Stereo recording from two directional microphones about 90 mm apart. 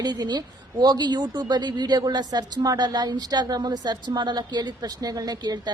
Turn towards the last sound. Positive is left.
turn(degrees=-50)  # may be behind; listen again after turning